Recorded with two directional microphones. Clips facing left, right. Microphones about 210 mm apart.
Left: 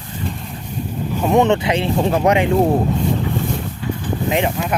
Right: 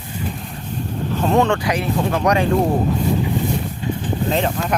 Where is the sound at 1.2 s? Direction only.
20° left (ahead or behind).